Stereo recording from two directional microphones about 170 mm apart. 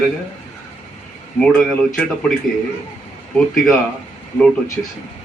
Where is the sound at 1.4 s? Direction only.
5° left (ahead or behind).